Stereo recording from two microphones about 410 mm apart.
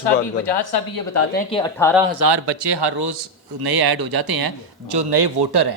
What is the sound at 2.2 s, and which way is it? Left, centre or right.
Speech, right.